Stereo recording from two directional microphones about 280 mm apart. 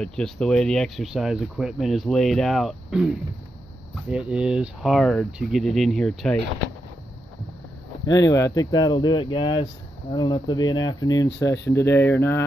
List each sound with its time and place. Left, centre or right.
0.0 s speech: centre
8.1 s speech: centre